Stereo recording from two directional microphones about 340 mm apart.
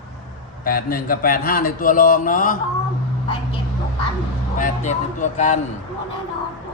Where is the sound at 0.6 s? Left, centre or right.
Left.